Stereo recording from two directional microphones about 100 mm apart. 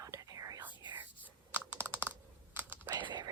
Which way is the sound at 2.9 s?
45° right (ahead or behind).